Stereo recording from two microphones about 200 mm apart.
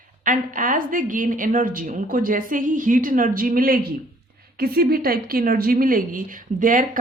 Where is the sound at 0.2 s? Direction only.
40° right (ahead or behind).